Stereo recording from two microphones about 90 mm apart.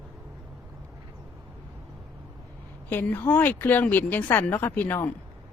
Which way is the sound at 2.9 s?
20° left (ahead or behind).